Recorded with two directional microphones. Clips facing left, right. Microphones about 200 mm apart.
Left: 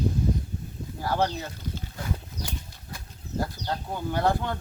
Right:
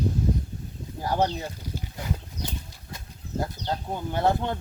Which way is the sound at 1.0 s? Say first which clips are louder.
Right 1 dB; 15° right (ahead or behind).